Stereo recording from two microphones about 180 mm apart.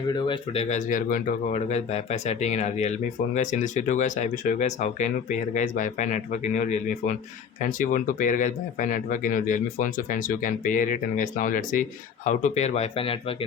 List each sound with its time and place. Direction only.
0.1 s speech: 30° left (ahead or behind)